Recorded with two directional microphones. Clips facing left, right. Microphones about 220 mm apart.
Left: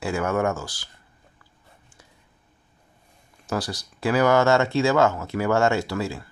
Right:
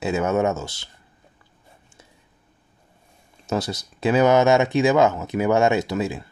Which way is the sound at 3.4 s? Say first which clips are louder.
Right 3 dB; 25° right (ahead or behind).